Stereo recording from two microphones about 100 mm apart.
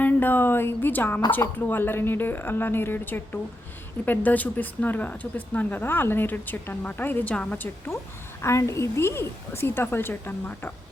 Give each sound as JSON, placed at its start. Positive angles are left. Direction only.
{"t": 0.0, "sound": "a woman's voice", "side_deg": 20}
{"t": 8.4, "sound": "speech", "side_deg": 30}